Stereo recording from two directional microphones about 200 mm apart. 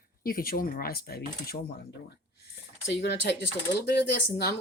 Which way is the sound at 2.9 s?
55° left (ahead or behind).